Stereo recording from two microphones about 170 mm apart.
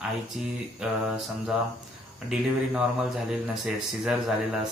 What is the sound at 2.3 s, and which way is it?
Speech, 5° right (ahead or behind).